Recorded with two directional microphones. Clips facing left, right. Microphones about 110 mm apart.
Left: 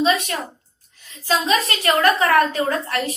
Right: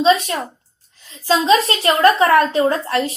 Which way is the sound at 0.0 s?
30° right (ahead or behind).